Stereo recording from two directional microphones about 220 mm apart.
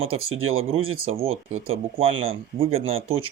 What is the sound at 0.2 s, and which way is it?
Speech, 70° right (ahead or behind).